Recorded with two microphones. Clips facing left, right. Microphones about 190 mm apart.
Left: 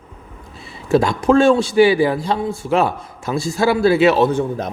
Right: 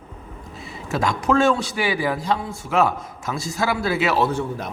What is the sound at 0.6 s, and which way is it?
Speech, 30° left (ahead or behind).